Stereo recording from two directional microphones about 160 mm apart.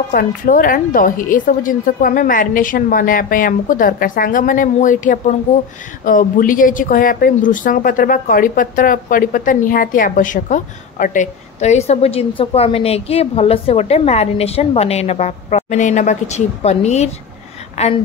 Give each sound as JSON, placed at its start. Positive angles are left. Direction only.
{"t": 0.1, "sound": "a woman's voice", "side_deg": 60}